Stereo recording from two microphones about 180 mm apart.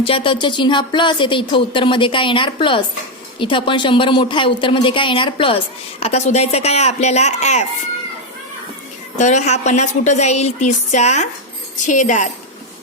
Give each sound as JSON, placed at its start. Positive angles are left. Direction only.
{"t": 0.0, "sound": "a woman's voice", "side_deg": 30}
{"t": 9.1, "sound": "a woman's voice", "side_deg": 40}